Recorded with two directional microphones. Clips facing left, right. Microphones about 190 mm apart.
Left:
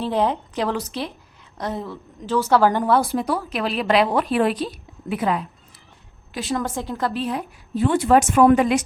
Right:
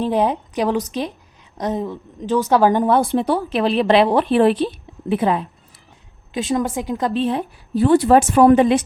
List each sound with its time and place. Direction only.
0.0 s a woman's voice: 15° right (ahead or behind)